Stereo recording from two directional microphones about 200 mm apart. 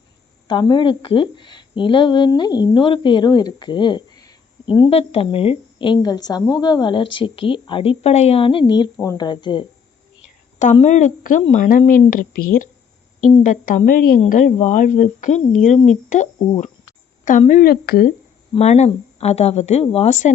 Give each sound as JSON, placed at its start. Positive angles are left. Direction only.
{"t": 0.4, "sound": "a woman's voice", "side_deg": 20}
{"t": 10.6, "sound": "speech", "side_deg": 35}
{"t": 18.5, "sound": "speech", "side_deg": 35}